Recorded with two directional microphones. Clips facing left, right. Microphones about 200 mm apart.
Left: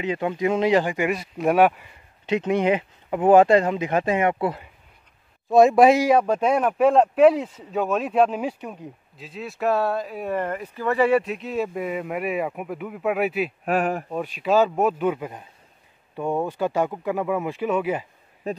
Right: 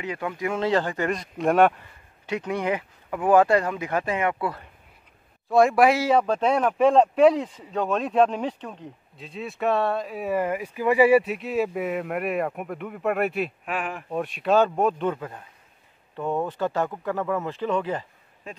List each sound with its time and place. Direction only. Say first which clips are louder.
0.0 s speech: left 5 dB; 25° left (ahead or behind); by 1.9 s 5° left (ahead or behind)
2.2 s speech: left 6 dB; 20° left (ahead or behind); by 13.5 s centre (ahead or behind)
13.7 s speech: left 8 dB; 40° left (ahead or behind)
14.1 s speech: right 1 dB; centre (ahead or behind)